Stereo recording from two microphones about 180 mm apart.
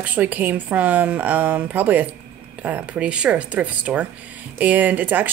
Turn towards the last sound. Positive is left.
turn(degrees=-10)  # may be behind; listen again after turning